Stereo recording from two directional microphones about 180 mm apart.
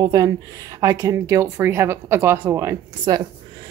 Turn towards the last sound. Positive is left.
turn(degrees=-20)  # may be behind; listen again after turning